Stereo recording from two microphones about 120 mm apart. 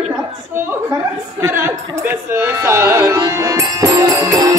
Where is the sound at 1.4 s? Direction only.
20° right (ahead or behind).